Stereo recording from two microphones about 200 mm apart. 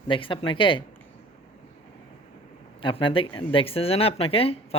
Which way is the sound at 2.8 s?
25° left (ahead or behind).